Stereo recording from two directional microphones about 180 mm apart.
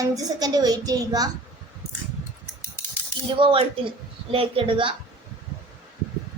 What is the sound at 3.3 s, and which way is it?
A child's voice, 30° right (ahead or behind).